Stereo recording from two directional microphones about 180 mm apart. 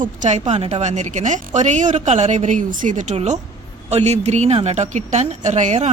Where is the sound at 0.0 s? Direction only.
40° right (ahead or behind).